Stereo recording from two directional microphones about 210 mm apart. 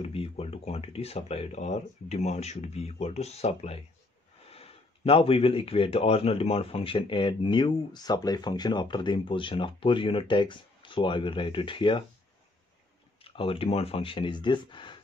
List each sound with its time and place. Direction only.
0.0 s speech: 25° left (ahead or behind)
13.2 s speech: 25° left (ahead or behind)